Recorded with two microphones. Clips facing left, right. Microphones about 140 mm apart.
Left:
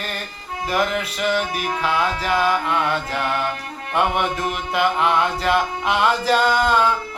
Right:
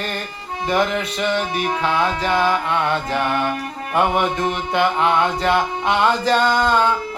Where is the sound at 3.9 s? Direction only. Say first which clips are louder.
Right 2 dB; centre (ahead or behind).